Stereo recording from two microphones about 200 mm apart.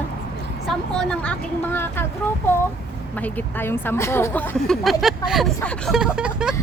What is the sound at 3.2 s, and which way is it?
Speech, 10° left (ahead or behind).